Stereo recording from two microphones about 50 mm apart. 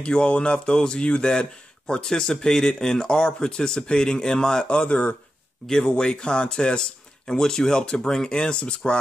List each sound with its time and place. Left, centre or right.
0.0 s speech: centre
5.7 s speech: centre